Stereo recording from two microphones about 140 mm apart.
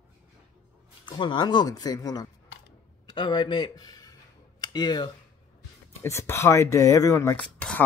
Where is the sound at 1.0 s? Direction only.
35° left (ahead or behind).